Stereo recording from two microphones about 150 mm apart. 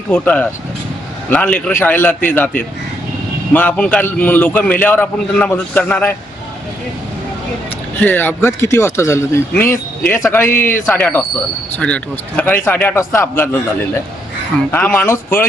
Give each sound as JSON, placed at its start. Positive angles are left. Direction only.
{"t": 0.1, "sound": "a man's voice", "side_deg": 10}
{"t": 3.5, "sound": "a man's voice", "side_deg": 10}
{"t": 7.9, "sound": "a man's voice", "side_deg": 10}